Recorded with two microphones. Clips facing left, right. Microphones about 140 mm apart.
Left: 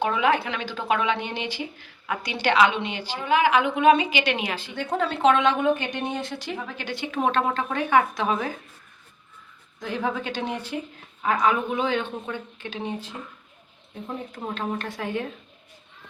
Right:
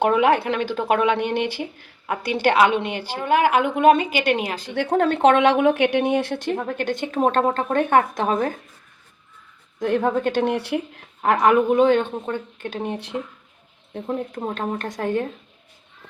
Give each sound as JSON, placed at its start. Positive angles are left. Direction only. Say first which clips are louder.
{"t": 0.0, "sound": "a woman's voice", "louder": "right 5 dB", "side_deg": -60}
{"t": 4.7, "sound": "a woman's voice", "louder": "right 8 dB", "side_deg": -70}
{"t": 9.8, "sound": "a woman's voice", "louder": "right 8 dB", "side_deg": -55}
{"t": 14.5, "sound": "a woman's voice", "louder": "right 3 dB", "side_deg": -45}